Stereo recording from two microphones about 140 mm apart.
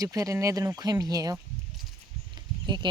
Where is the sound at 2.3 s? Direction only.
30° right (ahead or behind).